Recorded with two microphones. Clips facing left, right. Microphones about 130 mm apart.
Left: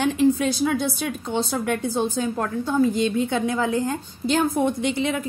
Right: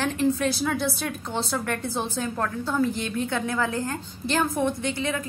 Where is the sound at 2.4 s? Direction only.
15° left (ahead or behind).